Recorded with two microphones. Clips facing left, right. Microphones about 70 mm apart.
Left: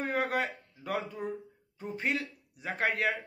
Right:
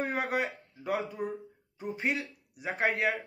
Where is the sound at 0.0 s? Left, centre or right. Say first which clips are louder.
Even; centre.